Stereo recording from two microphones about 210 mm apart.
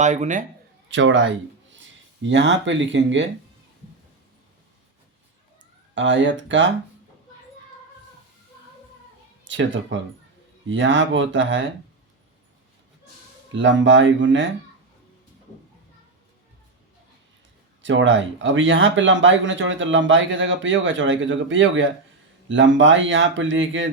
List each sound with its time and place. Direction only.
0.0 s speech: 35° right (ahead or behind)
0.9 s a man's voice: 60° right (ahead or behind)
5.9 s speech: 60° right (ahead or behind)
9.4 s speech: 60° right (ahead or behind)
13.5 s speech: 60° right (ahead or behind)
17.8 s speech: 60° right (ahead or behind)